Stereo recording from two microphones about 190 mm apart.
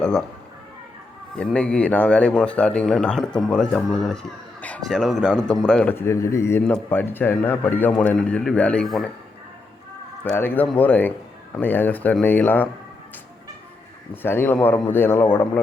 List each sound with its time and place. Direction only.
0.0 s a man's voice: 5° left (ahead or behind)
1.4 s a man's voice: 5° left (ahead or behind)
10.2 s a man's voice: 10° left (ahead or behind)
14.1 s a man's voice: 10° left (ahead or behind)